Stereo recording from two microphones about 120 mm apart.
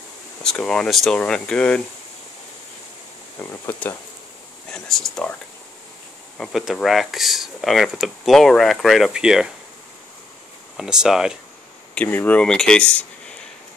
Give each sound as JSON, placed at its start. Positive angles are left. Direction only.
{"t": 0.4, "sound": "speech", "side_deg": 5}
{"t": 3.3, "sound": "speech", "side_deg": 20}
{"t": 4.6, "sound": "speech", "side_deg": 5}
{"t": 6.3, "sound": "speech", "side_deg": 0}
{"t": 10.8, "sound": "speech", "side_deg": -5}
{"t": 11.9, "sound": "speech", "side_deg": 15}